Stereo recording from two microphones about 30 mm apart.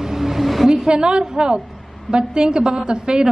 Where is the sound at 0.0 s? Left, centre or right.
Centre.